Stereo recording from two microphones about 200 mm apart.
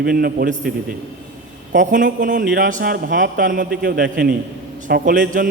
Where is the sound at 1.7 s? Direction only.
40° right (ahead or behind).